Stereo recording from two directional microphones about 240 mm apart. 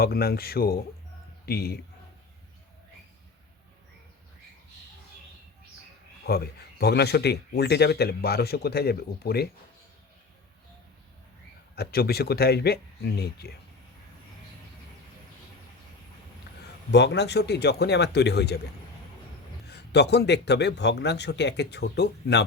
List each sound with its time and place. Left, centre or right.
0.0 s speech: left
6.2 s speech: left
11.7 s speech: left
16.5 s a sound: left
16.9 s a man's voice: left
19.6 s a man's voice: left